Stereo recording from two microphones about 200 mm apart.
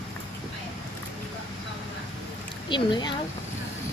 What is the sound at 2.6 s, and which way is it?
Speech, 25° left (ahead or behind).